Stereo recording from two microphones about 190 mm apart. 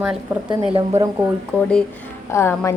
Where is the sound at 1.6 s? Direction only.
5° left (ahead or behind).